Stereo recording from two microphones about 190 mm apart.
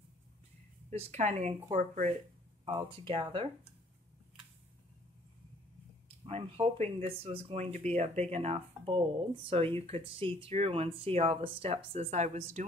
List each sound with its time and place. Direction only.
0.8 s speech: 35° right (ahead or behind)
2.6 s speech: 30° right (ahead or behind)
6.0 s speech: 30° right (ahead or behind)